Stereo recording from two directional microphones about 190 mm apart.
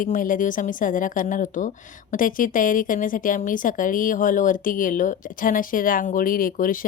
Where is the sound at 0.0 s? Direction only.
45° left (ahead or behind).